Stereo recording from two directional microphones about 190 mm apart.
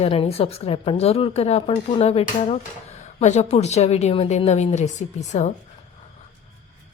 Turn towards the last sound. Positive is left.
turn(degrees=35)  # may be behind; listen again after turning